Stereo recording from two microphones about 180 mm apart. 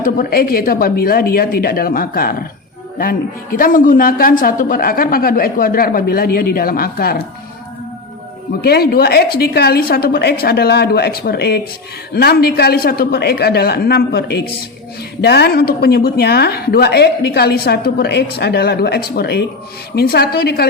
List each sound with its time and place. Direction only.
0.0 s a woman's voice: 55° left (ahead or behind)
8.6 s a woman's voice: 60° left (ahead or behind)